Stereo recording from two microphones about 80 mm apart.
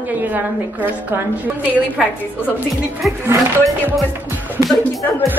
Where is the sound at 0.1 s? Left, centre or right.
Right.